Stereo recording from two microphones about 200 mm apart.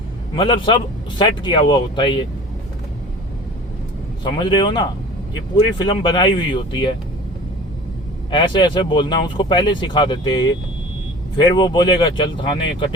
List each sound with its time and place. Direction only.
0.3 s speech: 25° left (ahead or behind)
4.2 s speech: 20° left (ahead or behind)
8.3 s speech: 25° left (ahead or behind)